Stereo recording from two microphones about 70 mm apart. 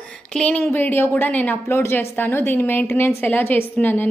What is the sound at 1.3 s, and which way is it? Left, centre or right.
Speech, left.